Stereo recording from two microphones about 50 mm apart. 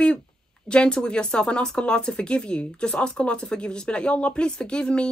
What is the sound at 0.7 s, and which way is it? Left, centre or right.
Speech, centre.